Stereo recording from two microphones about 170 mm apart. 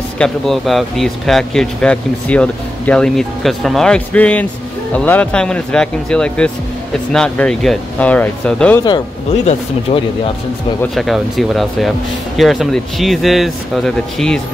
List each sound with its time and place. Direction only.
0.2 s speech: centre (ahead or behind)
9.4 s speech: 35° left (ahead or behind)
10.8 s speech: centre (ahead or behind)